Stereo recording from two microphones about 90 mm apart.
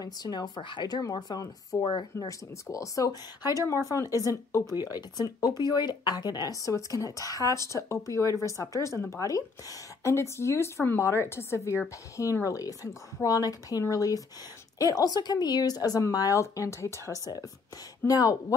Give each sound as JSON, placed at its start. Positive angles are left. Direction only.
{"t": 0.0, "sound": "speech", "side_deg": 50}